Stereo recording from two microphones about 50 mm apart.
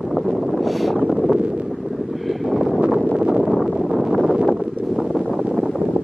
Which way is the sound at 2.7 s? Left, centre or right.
Centre.